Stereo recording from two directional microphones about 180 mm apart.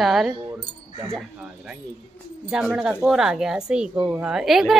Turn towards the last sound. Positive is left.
turn(degrees=0)  # may be behind; listen again after turning